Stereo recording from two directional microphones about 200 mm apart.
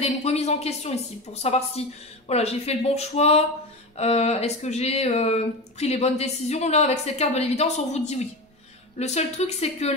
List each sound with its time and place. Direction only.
0.0 s speech: 35° left (ahead or behind)